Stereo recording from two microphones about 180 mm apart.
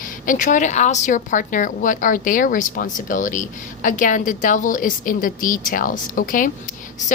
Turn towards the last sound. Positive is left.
turn(degrees=50)  # may be behind; listen again after turning